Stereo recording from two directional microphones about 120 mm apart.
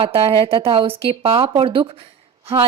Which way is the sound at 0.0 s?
50° right (ahead or behind).